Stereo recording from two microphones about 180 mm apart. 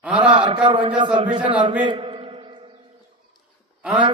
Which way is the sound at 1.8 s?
30° right (ahead or behind).